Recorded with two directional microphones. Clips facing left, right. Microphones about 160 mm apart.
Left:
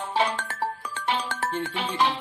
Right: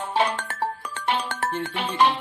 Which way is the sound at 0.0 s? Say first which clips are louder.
Right 2 dB; 60° right (ahead or behind).